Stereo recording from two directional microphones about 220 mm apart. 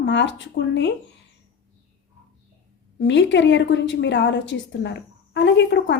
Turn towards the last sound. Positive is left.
turn(degrees=55)  # may be behind; listen again after turning